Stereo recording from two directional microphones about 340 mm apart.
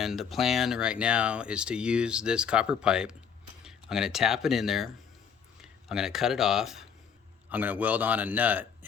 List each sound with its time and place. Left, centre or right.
0.0 s speech: centre